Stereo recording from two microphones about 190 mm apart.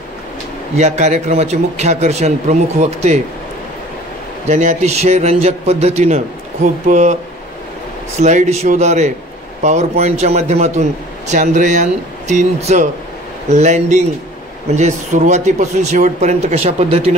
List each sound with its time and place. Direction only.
0.7 s a man's voice: 35° right (ahead or behind)
4.5 s a man's voice: 35° right (ahead or behind)
8.2 s a man's voice: 40° right (ahead or behind)